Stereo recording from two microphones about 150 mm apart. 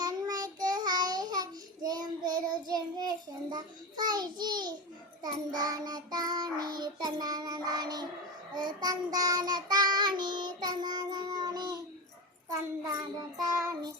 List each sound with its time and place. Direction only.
0.0 s child singing: 25° right (ahead or behind)